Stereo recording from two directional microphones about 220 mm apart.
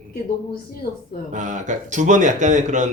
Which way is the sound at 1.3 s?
35° right (ahead or behind).